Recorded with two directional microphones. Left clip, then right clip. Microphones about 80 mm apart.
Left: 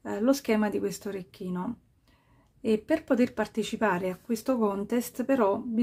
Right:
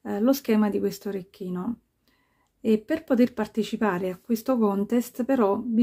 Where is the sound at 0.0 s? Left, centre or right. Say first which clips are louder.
Right 2 dB; right.